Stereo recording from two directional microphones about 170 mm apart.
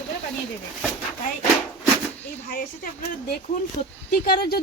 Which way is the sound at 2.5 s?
55° left (ahead or behind).